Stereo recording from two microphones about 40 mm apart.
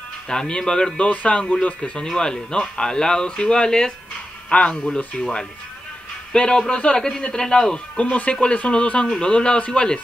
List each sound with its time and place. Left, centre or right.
0.3 s speech: centre; by 1.8 s left
2.1 s speech: left
4.5 s a man's voice: left
8.0 s speech: left